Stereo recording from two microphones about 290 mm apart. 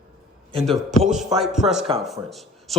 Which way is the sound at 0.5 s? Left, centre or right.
Centre.